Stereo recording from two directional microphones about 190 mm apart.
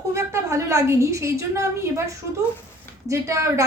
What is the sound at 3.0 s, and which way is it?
Speech, 15° right (ahead or behind).